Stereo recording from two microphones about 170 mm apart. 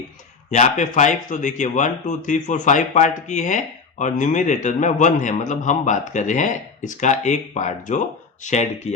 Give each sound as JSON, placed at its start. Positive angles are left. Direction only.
{"t": 0.5, "sound": "speech", "side_deg": 45}